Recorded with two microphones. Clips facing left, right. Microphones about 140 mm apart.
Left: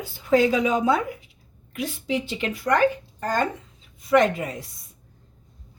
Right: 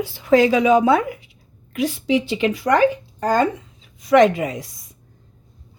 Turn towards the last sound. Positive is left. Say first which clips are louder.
# right 6 dB
turn(degrees=-90)